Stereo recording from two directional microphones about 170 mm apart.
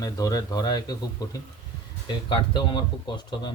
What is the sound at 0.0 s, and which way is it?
Speech, 20° left (ahead or behind).